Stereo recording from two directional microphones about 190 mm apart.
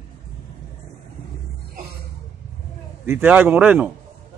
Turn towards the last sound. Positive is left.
turn(degrees=-5)  # may be behind; listen again after turning